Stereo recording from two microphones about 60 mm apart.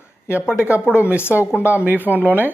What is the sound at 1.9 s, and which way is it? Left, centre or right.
Speech, right.